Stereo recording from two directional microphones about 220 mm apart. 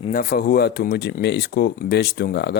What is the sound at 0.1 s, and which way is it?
Speech, 40° left (ahead or behind).